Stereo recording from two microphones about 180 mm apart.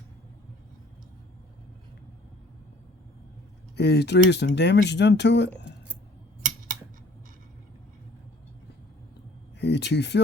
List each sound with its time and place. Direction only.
3.8 s speech: 65° left (ahead or behind)
9.6 s speech: 70° left (ahead or behind)